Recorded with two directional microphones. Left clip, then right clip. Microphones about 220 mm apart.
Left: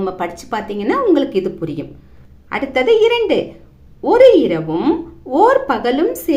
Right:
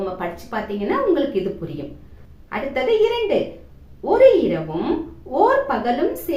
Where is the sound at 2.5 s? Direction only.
50° left (ahead or behind).